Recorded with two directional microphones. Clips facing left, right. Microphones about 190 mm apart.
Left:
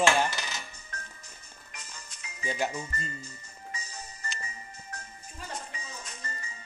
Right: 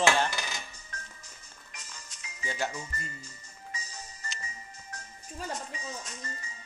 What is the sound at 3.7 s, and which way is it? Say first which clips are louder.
Music: left 1 dB; 60° left (ahead or behind).